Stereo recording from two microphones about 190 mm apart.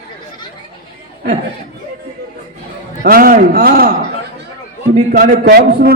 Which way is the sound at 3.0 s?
50° right (ahead or behind).